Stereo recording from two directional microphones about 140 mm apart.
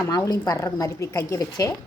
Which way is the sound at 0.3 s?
25° left (ahead or behind).